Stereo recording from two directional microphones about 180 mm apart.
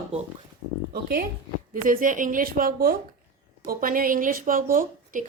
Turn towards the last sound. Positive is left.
turn(degrees=-50)  # may be behind; listen again after turning